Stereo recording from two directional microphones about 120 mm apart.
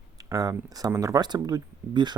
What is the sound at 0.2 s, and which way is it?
Speech, 30° right (ahead or behind).